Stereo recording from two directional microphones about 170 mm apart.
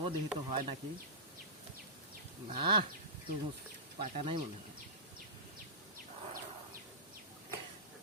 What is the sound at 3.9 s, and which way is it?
Speech, 40° right (ahead or behind).